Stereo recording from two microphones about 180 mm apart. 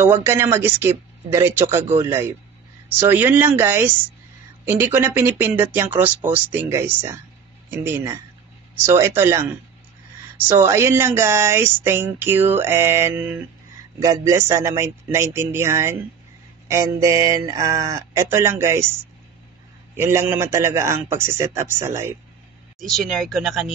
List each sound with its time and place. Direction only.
0.0 s speech: 10° right (ahead or behind)
10.6 s speech: 15° right (ahead or behind)
20.0 s speech: 15° right (ahead or behind)
22.8 s speech: centre (ahead or behind)